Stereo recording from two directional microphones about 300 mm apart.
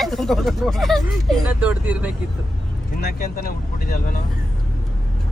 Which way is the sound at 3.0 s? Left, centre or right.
Left.